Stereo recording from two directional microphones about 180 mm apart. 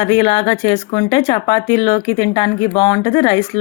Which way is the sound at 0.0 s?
25° left (ahead or behind).